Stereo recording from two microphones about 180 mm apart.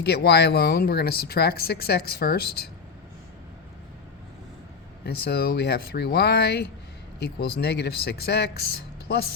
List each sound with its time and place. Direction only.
0.0 s speech: 65° left (ahead or behind)
5.0 s speech: 60° left (ahead or behind)